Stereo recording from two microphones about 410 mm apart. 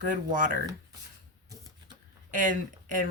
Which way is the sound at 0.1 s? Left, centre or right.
Centre.